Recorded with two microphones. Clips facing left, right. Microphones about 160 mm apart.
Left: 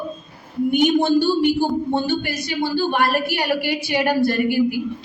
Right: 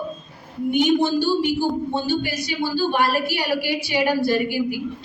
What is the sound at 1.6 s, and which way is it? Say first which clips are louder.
Speech: left 3 dB; 55° left (ahead or behind).